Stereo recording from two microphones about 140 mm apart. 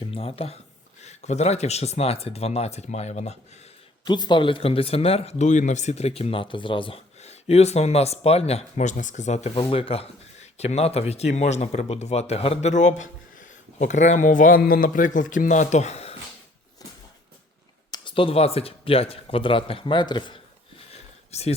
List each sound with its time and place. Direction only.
0.1 s speech: 40° left (ahead or behind)
1.0 s speech: 55° left (ahead or behind)
4.0 s speech: 30° left (ahead or behind); by 9.5 s 55° left (ahead or behind)
9.6 s speech: 40° left (ahead or behind)
17.9 s speech: 35° left (ahead or behind)
21.3 s speech: 50° left (ahead or behind)